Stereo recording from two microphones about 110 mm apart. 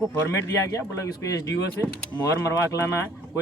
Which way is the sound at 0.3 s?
30° left (ahead or behind).